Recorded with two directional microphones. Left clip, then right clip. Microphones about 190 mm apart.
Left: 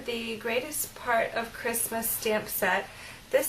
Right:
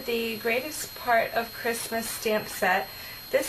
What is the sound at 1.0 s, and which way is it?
A woman's voice, 20° right (ahead or behind).